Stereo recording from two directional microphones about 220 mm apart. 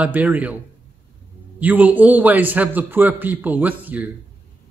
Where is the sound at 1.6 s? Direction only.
5° right (ahead or behind).